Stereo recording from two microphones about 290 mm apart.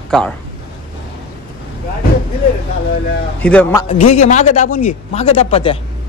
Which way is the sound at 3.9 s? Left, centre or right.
Left.